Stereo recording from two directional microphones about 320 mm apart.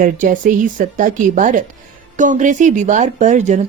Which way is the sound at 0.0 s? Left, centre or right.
Right.